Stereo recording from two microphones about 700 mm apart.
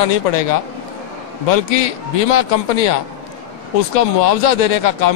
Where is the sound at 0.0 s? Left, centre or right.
Left.